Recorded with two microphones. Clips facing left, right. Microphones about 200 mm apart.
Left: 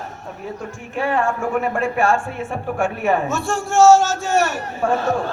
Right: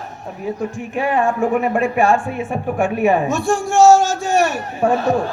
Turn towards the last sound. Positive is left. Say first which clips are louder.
# right 3 dB
turn(degrees=-15)  # may be behind; listen again after turning